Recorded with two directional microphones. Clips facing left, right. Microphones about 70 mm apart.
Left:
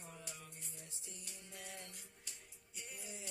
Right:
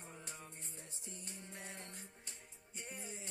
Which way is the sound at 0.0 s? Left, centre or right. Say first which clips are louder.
Right 1 dB; right.